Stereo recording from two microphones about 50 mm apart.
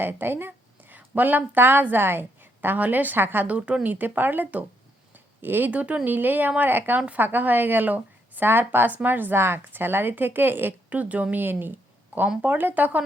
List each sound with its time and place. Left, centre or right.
0.0 s a sound: right
0.9 s a woman's voice: right
3.4 s a woman's voice: right
5.1 s a sound: right
5.7 s a woman's voice: right
6.1 s a woman's voice: right
10.8 s a woman's voice: right